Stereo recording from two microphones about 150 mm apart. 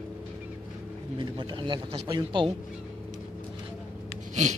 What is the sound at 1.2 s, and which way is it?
Speech, 30° right (ahead or behind).